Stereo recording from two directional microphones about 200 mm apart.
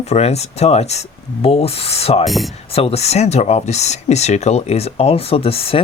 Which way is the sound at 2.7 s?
30° left (ahead or behind).